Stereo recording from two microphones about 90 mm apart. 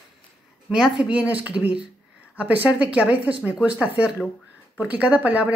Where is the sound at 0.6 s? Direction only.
10° right (ahead or behind).